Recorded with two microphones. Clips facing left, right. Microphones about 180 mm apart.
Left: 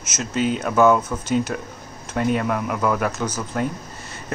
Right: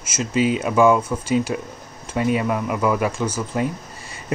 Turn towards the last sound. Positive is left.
turn(degrees=-5)  # may be behind; listen again after turning